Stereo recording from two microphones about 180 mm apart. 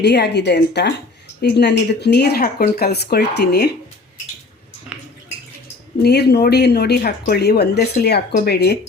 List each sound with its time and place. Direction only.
0.0 s speech: 70° left (ahead or behind)
4.9 s a sound: 5° right (ahead or behind)
6.0 s speech: 65° left (ahead or behind)